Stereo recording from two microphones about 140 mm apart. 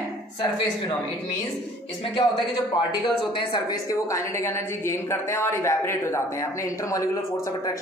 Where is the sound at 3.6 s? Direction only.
20° left (ahead or behind).